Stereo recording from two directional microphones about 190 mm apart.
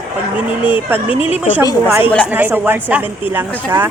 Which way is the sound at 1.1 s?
30° left (ahead or behind).